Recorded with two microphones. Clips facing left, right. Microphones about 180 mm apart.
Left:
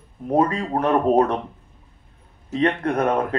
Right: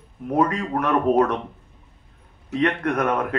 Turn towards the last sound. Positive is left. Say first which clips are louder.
# left 2 dB
turn(degrees=30)  # may be behind; listen again after turning